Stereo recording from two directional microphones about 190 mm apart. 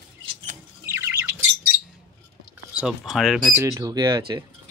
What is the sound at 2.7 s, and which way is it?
Speech, 5° right (ahead or behind).